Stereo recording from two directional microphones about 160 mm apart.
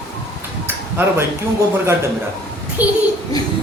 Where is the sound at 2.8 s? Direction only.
10° right (ahead or behind).